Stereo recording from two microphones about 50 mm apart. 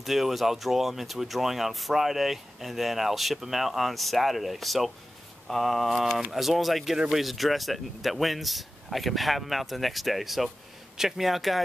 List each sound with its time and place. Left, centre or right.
0.0 s speech: centre